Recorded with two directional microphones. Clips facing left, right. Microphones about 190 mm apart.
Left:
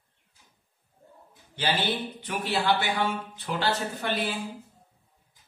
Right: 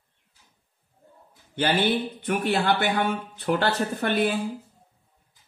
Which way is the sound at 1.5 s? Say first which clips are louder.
Right 5 dB; 55° right (ahead or behind).